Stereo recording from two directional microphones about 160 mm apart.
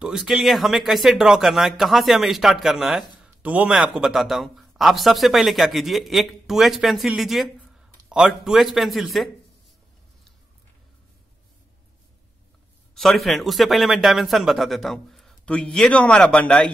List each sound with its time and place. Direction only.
0.0 s speech: 5° right (ahead or behind)
12.9 s speech: centre (ahead or behind)